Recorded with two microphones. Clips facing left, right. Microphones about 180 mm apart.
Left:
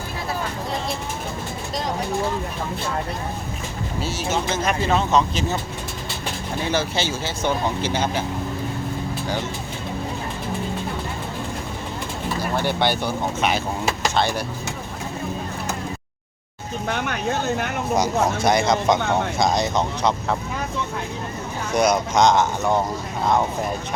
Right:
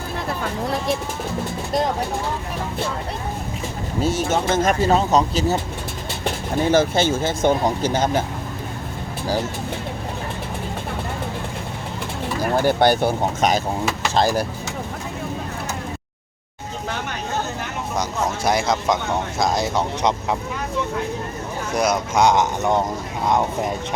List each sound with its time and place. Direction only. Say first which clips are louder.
4.0 s speech: right 5 dB; 50° right (ahead or behind)
6.7 s speech: right 7 dB; 50° right (ahead or behind)
12.4 s speech: right 6 dB; 45° right (ahead or behind)
18.4 s speech: even; 5° right (ahead or behind)
21.8 s speech: left 1 dB; 5° right (ahead or behind)